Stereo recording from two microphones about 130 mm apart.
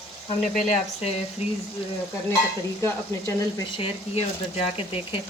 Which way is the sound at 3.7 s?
50° left (ahead or behind).